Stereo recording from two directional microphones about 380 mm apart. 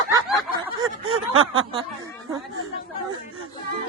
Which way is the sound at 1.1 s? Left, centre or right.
Right.